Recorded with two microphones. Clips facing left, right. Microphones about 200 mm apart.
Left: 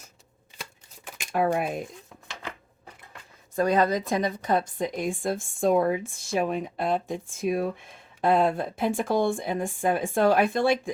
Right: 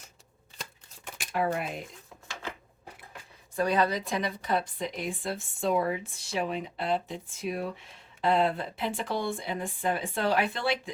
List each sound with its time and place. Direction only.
1.4 s speech: 50° left (ahead or behind)
3.5 s speech: 45° left (ahead or behind)